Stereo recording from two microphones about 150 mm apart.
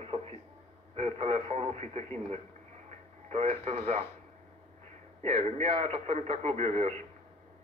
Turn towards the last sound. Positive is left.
turn(degrees=-50)  # may be behind; listen again after turning